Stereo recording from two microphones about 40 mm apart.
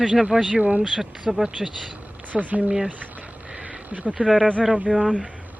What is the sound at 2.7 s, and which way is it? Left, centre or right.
Speech, right.